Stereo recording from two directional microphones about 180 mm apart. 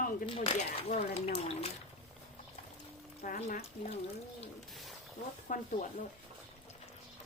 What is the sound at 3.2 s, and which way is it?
Speech, 45° left (ahead or behind).